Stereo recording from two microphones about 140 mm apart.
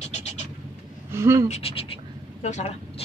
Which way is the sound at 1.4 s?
50° left (ahead or behind).